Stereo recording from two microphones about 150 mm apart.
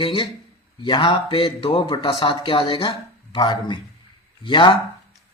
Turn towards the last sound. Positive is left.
turn(degrees=35)  # may be behind; listen again after turning